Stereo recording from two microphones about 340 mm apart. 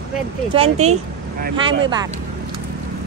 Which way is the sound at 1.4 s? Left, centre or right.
Right.